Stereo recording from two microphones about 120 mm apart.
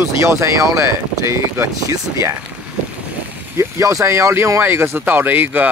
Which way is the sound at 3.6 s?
25° right (ahead or behind).